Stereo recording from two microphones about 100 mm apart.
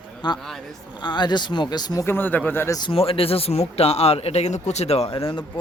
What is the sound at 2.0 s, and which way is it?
Speech, 20° left (ahead or behind).